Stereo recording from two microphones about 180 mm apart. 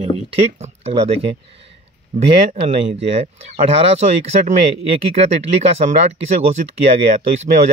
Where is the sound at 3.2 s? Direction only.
35° right (ahead or behind).